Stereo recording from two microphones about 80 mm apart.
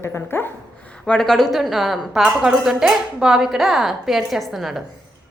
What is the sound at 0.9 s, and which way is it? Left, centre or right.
A woman's voice, centre.